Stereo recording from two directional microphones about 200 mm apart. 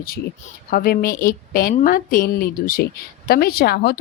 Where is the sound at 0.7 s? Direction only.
45° left (ahead or behind).